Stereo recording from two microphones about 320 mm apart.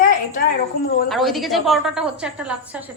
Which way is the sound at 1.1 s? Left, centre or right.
Centre.